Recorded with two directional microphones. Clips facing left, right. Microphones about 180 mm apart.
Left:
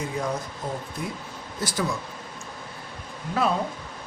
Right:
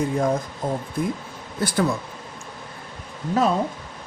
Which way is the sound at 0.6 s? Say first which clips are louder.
Right 8 dB; 50° right (ahead or behind).